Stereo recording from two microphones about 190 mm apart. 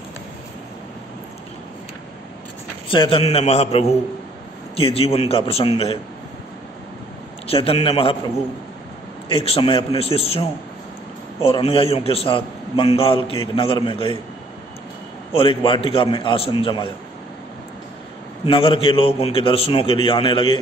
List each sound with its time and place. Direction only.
2.9 s a man's voice: 25° left (ahead or behind)
7.4 s a man's voice: 30° left (ahead or behind)
9.3 s a man's voice: 30° left (ahead or behind)
11.4 s a man's voice: 30° left (ahead or behind)
15.3 s a man's voice: 25° left (ahead or behind)
18.4 s a man's voice: 30° left (ahead or behind)